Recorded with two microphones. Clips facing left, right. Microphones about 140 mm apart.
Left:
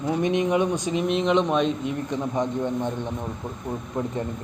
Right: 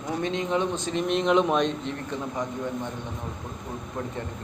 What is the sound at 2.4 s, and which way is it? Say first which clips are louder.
Speech: left 6 dB; 20° left (ahead or behind).